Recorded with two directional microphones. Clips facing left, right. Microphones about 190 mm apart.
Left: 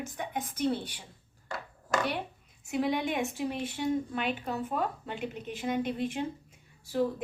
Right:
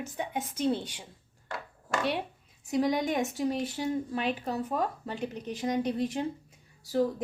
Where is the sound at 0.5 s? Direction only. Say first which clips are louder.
Right 1 dB; 25° right (ahead or behind).